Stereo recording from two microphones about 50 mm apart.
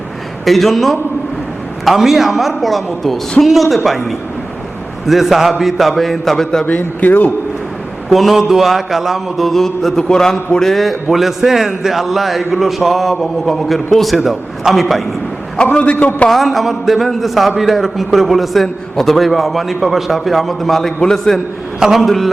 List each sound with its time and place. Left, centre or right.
0.4 s mantra: centre
6.7 s a man's voice: left
8.1 s mantra: centre
15.5 s a man's voice: left
16.3 s mantra: centre
21.8 s a man's voice: centre
22.0 s mantra: centre